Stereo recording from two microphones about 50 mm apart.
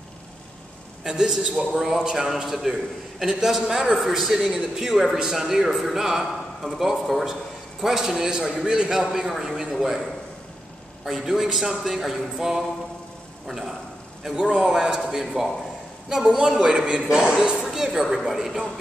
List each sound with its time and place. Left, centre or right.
1.0 s a man's voice: centre
11.1 s a man's voice: centre
14.3 s a man's voice: centre